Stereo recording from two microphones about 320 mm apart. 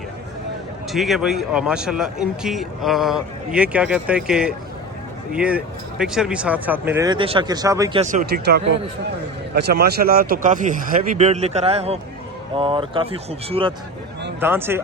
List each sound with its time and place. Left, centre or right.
0.9 s a man's voice: centre